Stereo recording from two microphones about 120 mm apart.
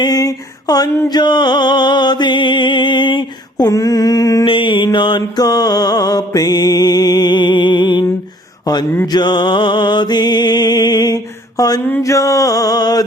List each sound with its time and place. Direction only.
0.0 s a sound: 30° left (ahead or behind)
1.1 s music: 35° left (ahead or behind)
3.7 s music: 30° left (ahead or behind)
4.4 s mantra: 45° left (ahead or behind)
8.7 s music: 30° left (ahead or behind)
11.8 s mantra: 20° left (ahead or behind)